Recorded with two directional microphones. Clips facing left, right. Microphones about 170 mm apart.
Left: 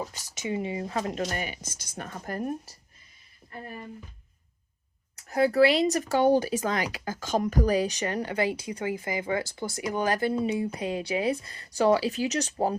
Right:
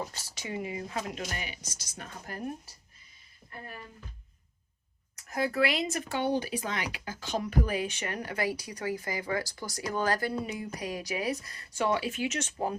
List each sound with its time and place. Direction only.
0.1 s speech: 20° left (ahead or behind); by 2.4 s 50° left (ahead or behind)
5.3 s speech: 35° left (ahead or behind)